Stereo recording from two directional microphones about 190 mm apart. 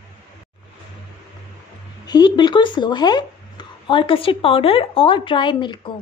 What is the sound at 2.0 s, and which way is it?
Speech, 20° left (ahead or behind).